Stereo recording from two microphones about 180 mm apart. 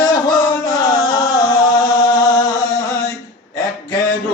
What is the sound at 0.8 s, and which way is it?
Music, 20° left (ahead or behind).